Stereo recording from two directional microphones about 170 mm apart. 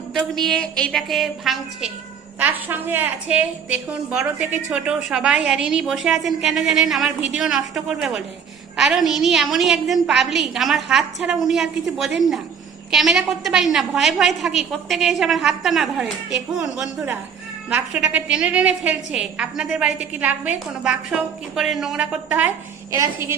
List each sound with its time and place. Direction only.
0.1 s a woman's voice: centre (ahead or behind)
2.4 s a woman's voice: 10° right (ahead or behind)
22.9 s a woman's voice: 20° right (ahead or behind)